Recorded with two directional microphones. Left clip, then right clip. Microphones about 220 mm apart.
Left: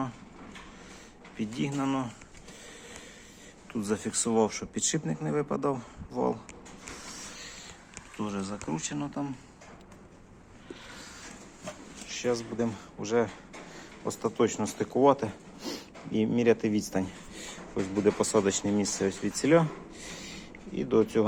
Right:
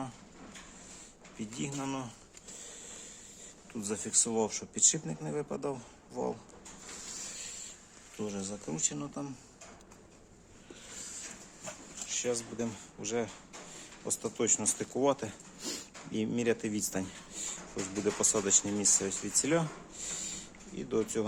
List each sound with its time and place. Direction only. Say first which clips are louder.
1.4 s speech: left 7 dB; 5° right (ahead or behind)
3.7 s speech: left 5 dB; centre (ahead or behind)
6.9 s printer: even; 5° right (ahead or behind)
8.2 s speech: left 3 dB; 10° right (ahead or behind)
10.9 s vehicle: left 1 dB; 15° right (ahead or behind)
12.0 s a sound: left 4 dB; 5° right (ahead or behind)
12.5 s speech: left 6 dB; centre (ahead or behind)